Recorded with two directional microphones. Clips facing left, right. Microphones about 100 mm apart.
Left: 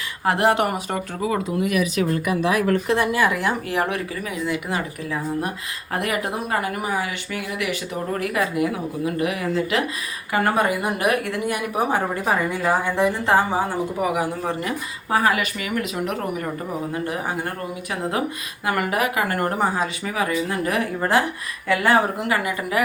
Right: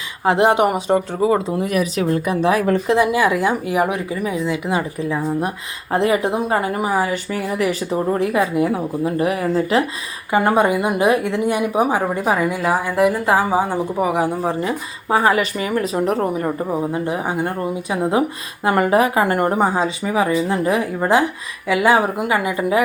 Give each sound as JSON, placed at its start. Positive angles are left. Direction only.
{"t": 0.3, "sound": "speech", "side_deg": -20}
{"t": 2.6, "sound": "speech", "side_deg": -15}
{"t": 8.1, "sound": "a woman's voice", "side_deg": -25}
{"t": 10.3, "sound": "speech", "side_deg": -25}
{"t": 11.8, "sound": "a woman's voice", "side_deg": -10}
{"t": 14.1, "sound": "a woman's voice", "side_deg": -25}